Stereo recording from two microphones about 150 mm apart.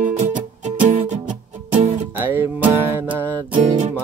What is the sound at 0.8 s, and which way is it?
Music, 45° right (ahead or behind).